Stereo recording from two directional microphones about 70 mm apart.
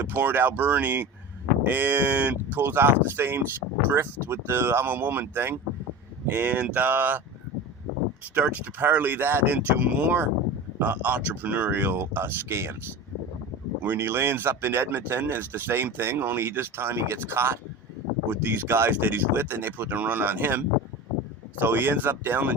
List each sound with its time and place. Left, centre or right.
0.0 s speech: right
8.4 s speech: right
13.8 s speech: right